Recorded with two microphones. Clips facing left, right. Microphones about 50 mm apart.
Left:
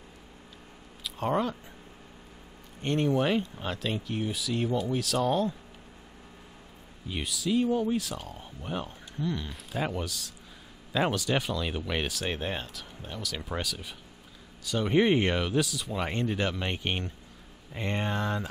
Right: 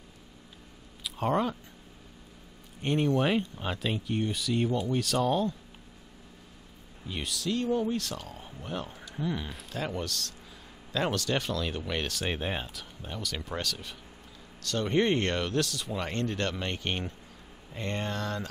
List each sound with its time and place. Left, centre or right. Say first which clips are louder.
1.0 s speech: even; centre
2.8 s speech: even; centre
7.1 s speech: left 2 dB; centre
9.1 s speech: even; centre
9.7 s speech: left 2 dB; centre